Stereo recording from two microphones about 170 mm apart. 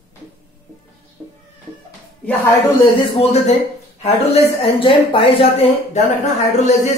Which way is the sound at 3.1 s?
35° left (ahead or behind).